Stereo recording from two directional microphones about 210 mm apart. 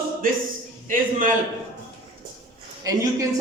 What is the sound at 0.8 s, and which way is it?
Speech, 40° right (ahead or behind).